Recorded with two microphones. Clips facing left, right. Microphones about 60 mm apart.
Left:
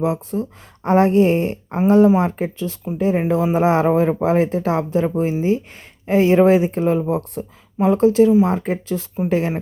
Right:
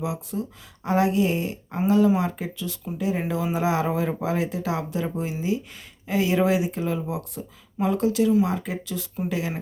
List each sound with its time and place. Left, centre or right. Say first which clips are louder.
0.0 s speech: left 8 dB; left